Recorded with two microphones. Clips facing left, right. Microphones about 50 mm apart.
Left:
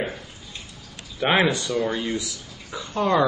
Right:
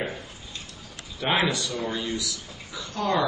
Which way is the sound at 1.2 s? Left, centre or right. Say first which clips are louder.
Left 4 dB; centre.